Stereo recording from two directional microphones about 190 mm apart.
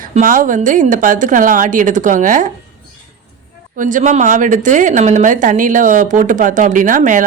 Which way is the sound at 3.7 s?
45° right (ahead or behind).